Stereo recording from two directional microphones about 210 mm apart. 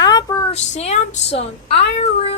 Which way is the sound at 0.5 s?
30° left (ahead or behind).